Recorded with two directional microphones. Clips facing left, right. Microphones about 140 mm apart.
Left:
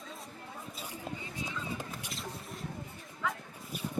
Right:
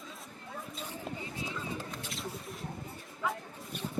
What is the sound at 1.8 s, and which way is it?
Rodents, 15° left (ahead or behind).